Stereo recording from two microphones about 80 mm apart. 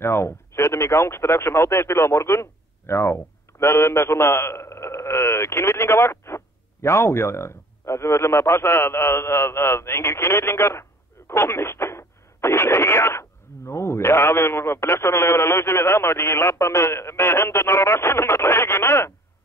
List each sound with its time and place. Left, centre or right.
0.0 s speech: left